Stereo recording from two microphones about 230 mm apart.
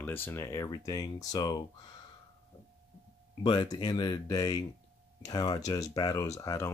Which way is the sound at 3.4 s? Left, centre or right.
Centre.